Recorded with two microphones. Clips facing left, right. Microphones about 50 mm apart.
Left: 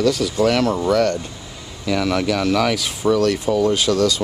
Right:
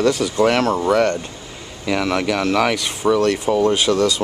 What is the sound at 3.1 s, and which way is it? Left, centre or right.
Speech, right.